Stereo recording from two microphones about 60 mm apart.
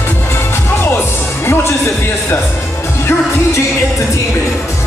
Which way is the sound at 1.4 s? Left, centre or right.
Left.